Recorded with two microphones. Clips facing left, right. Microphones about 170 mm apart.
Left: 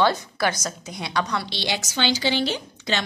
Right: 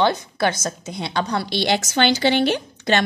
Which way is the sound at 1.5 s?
55° right (ahead or behind).